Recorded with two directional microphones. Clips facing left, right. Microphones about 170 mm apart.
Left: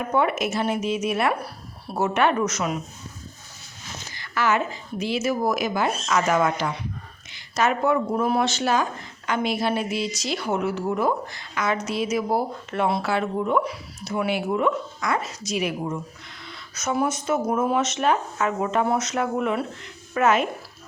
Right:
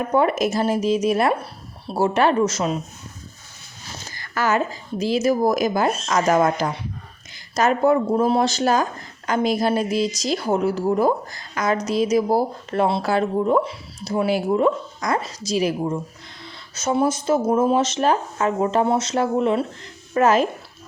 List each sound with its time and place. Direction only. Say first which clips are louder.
0.0 s speech: right 4 dB; 35° right (ahead or behind)
3.8 s speech: right 1 dB; 35° right (ahead or behind)